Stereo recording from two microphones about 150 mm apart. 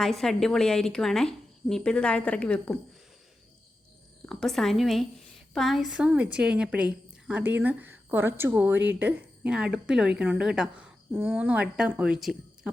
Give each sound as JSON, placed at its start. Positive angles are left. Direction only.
{"t": 0.0, "sound": "a woman's voice", "side_deg": 0}
{"t": 4.3, "sound": "a woman's voice", "side_deg": 0}